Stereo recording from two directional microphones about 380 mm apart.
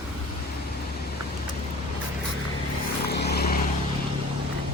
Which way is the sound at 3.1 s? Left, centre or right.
Left.